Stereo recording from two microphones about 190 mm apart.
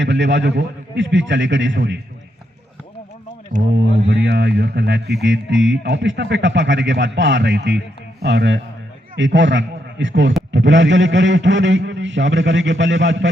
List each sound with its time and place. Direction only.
0.0 s a man's voice: 70° right (ahead or behind)
3.8 s a man's voice: 70° right (ahead or behind)